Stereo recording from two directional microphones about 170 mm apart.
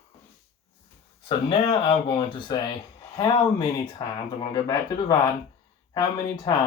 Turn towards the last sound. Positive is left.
turn(degrees=25)  # may be behind; listen again after turning